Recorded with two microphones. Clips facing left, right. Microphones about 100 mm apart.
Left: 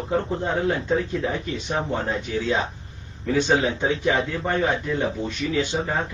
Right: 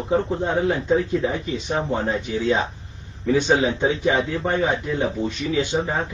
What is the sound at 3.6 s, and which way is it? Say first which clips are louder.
A man's voice: right 2 dB; 15° right (ahead or behind).